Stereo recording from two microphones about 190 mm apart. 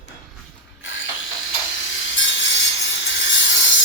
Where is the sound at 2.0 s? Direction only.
80° left.